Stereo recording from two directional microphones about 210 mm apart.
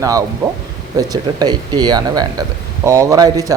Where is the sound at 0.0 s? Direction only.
15° right (ahead or behind).